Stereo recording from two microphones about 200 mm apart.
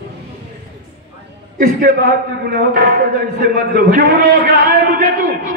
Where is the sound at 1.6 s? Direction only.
45° right (ahead or behind).